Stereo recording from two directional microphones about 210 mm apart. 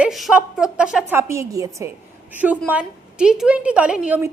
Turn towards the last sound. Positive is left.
turn(degrees=-5)  # may be behind; listen again after turning